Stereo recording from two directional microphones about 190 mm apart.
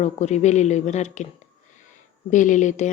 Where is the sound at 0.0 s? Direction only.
35° left (ahead or behind).